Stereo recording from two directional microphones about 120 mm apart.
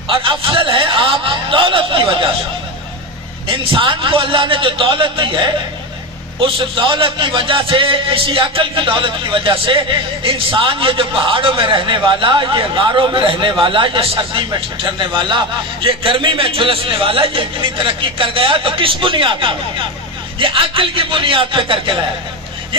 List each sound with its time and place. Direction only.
0.1 s a man's voice: 50° right (ahead or behind)
3.4 s a man's voice: 50° right (ahead or behind)